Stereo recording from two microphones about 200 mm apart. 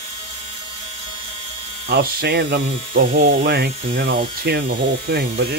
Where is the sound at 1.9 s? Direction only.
50° right (ahead or behind).